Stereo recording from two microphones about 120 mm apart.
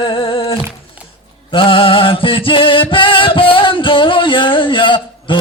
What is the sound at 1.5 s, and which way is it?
Music, 50° left (ahead or behind).